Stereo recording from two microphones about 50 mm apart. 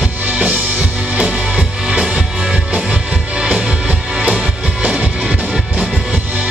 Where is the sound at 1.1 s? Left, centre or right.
Right.